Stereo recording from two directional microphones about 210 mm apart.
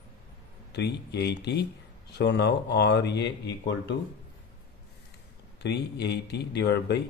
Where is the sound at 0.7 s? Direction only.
50° left (ahead or behind).